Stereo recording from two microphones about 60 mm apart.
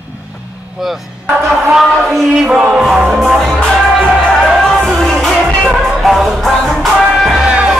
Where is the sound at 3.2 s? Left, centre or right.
Centre.